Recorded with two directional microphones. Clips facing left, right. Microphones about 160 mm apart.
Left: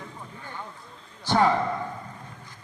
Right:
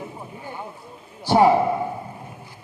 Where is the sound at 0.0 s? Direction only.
20° right (ahead or behind).